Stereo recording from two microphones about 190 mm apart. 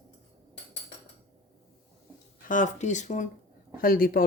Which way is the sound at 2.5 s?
40° left (ahead or behind).